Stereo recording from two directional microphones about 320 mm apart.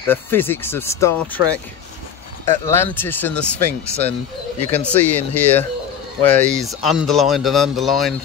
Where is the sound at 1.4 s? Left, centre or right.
Centre.